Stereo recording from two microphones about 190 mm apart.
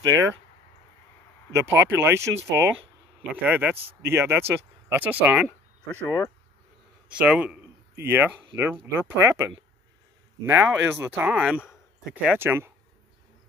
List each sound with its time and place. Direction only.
0.0 s speech: 15° right (ahead or behind)
1.5 s speech: 15° right (ahead or behind)
6.0 s speech: 15° left (ahead or behind)
7.1 s a man's voice: 5° right (ahead or behind)